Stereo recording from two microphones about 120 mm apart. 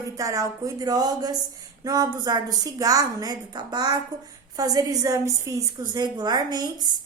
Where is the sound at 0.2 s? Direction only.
30° right (ahead or behind).